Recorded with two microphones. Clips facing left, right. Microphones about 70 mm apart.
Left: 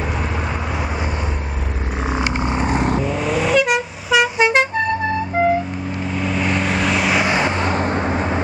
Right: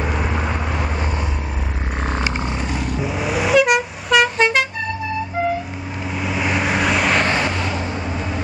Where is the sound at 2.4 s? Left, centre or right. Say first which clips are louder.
Left 5 dB; left.